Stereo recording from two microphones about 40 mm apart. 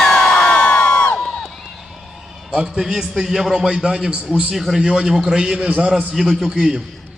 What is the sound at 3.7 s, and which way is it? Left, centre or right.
Speech, centre.